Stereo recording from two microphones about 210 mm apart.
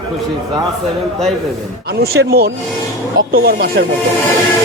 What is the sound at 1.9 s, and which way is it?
Speech, 50° right (ahead or behind).